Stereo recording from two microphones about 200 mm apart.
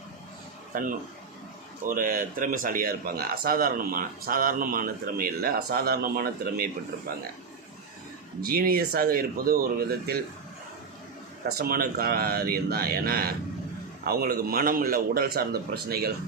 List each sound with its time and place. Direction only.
0.7 s speech: 45° right (ahead or behind)
8.4 s speech: 45° right (ahead or behind)
11.5 s speech: 50° right (ahead or behind)